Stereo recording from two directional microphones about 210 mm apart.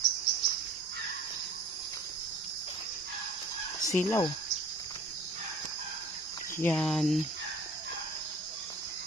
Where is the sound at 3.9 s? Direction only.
10° left (ahead or behind).